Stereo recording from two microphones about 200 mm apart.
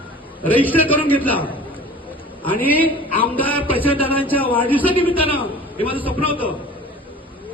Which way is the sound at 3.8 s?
25° left (ahead or behind).